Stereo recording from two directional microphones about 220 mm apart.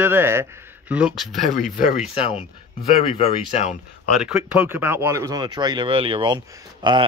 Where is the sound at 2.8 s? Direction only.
30° left (ahead or behind).